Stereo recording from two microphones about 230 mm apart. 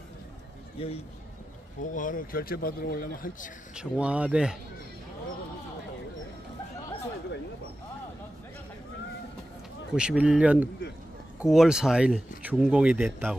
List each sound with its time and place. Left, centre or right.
0.8 s a man's voice: left
1.8 s speech: left
3.7 s speech: centre
9.9 s speech: centre